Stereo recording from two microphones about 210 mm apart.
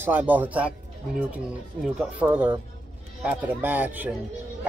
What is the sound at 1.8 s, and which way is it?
Speech, 5° right (ahead or behind).